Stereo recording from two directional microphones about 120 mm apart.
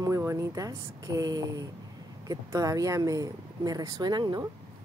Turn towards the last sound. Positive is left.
turn(degrees=-35)  # may be behind; listen again after turning